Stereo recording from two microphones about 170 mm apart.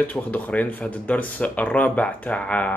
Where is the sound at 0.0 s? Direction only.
10° left (ahead or behind).